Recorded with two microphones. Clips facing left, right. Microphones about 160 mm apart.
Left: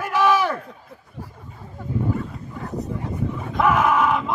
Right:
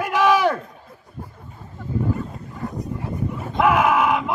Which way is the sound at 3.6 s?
10° right (ahead or behind).